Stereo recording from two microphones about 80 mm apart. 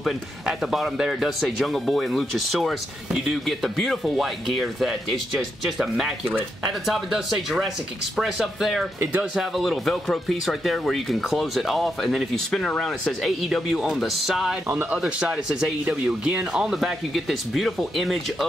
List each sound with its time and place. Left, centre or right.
0.0 s speech: centre